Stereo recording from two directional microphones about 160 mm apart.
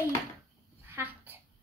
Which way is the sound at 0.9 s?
10° right (ahead or behind).